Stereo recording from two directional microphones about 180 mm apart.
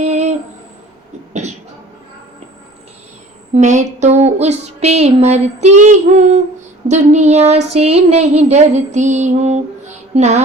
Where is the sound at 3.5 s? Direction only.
40° right (ahead or behind).